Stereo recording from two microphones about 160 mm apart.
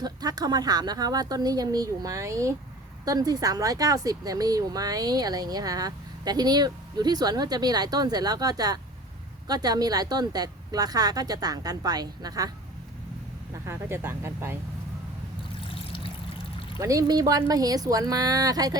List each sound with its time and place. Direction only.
0.0 s speech: 25° right (ahead or behind)
13.7 s speech: 15° right (ahead or behind)
15.7 s trickle: 35° left (ahead or behind)
16.8 s speech: 20° right (ahead or behind)